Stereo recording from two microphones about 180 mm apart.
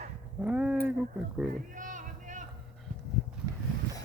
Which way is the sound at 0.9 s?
10° right (ahead or behind).